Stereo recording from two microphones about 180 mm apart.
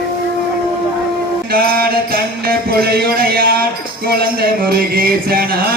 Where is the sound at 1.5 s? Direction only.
55° right (ahead or behind).